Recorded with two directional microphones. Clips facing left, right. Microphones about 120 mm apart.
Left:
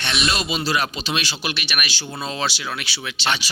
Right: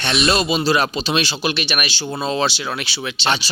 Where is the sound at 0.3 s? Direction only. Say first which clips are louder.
Right 7 dB; 35° right (ahead or behind).